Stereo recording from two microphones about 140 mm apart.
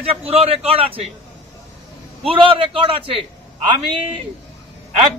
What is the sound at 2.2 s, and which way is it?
A man's voice, 35° right (ahead or behind).